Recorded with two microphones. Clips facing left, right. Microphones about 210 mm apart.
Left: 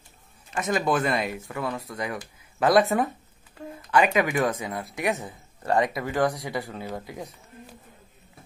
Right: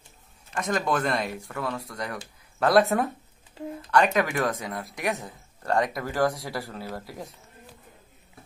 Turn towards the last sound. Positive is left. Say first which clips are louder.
# left 2 dB
turn(degrees=0)  # may be behind; listen again after turning